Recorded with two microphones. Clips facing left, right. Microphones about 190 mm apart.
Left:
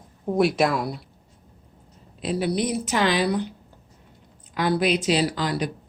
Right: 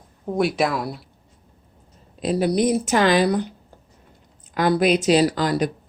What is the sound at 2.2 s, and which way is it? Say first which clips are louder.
Speech: right 5 dB; 40° right (ahead or behind).